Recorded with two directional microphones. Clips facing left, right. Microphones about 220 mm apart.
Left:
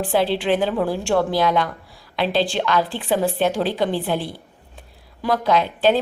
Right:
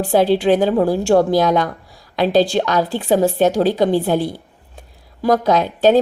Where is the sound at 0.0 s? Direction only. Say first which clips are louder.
Right 6 dB; 40° right (ahead or behind).